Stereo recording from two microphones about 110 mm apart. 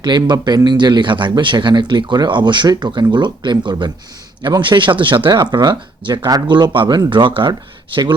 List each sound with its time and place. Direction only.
0.3 s speech: 40° right (ahead or behind)